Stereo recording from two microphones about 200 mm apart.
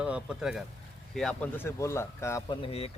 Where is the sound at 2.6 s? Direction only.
30° left (ahead or behind).